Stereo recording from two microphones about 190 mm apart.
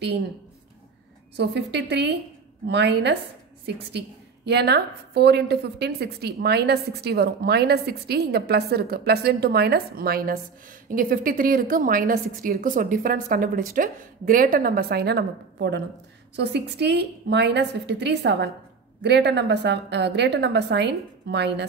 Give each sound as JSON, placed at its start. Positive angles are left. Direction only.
{"t": 1.3, "sound": "a woman's voice", "side_deg": -60}